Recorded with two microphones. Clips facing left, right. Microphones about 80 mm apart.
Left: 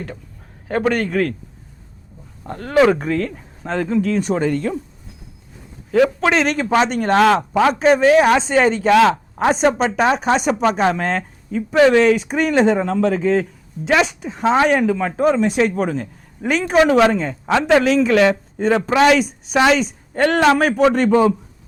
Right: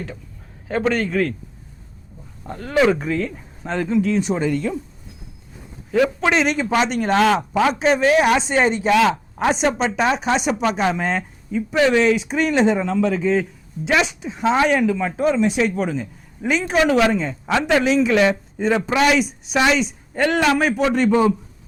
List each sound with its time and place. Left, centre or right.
0.7 s speech: left
2.5 s speech: left
5.9 s speech: left
6.4 s speech: left